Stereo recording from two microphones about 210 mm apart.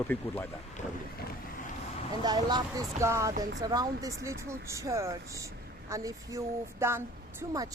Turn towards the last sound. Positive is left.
turn(degrees=-15)  # may be behind; listen again after turning